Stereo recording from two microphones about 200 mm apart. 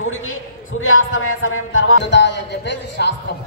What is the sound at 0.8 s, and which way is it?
Music, 90° left.